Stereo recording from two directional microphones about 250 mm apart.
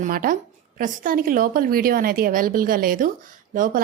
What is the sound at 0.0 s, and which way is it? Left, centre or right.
A woman's voice, right.